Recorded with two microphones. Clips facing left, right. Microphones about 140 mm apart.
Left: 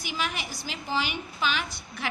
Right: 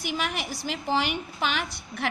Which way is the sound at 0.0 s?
55° right (ahead or behind).